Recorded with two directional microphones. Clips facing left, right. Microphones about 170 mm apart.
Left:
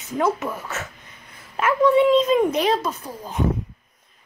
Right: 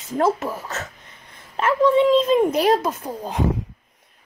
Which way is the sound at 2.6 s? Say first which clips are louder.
Right 3 dB; 40° right (ahead or behind).